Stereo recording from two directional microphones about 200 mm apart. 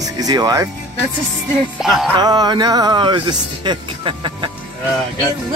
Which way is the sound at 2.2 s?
20° right (ahead or behind).